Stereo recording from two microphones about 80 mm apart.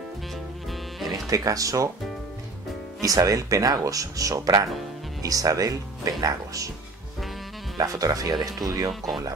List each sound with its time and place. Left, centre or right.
1.1 s speech: right
3.0 s speech: right
7.7 s speech: right